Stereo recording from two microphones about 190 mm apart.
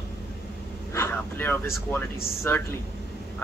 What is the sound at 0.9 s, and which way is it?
A man's voice, 10° left (ahead or behind).